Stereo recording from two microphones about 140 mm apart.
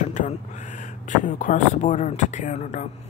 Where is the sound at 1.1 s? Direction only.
65° left (ahead or behind).